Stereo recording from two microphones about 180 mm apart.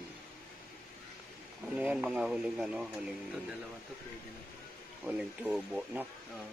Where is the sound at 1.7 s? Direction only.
5° right (ahead or behind).